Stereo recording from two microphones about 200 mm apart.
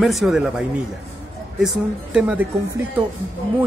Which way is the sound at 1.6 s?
5° right (ahead or behind).